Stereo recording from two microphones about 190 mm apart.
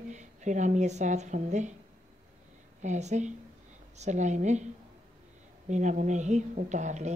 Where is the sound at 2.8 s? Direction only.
40° right (ahead or behind).